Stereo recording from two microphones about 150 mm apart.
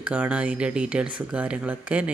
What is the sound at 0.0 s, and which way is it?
Speech, 10° right (ahead or behind).